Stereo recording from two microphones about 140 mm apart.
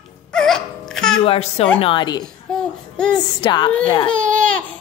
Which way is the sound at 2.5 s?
5° left (ahead or behind).